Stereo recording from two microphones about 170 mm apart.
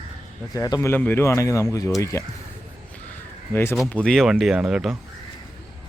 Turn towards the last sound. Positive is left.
turn(degrees=-5)  # may be behind; listen again after turning